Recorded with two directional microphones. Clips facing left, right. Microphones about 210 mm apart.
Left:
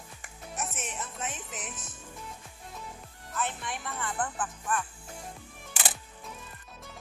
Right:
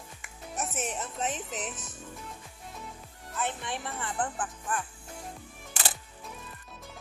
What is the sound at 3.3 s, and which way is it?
Speech, 25° right (ahead or behind).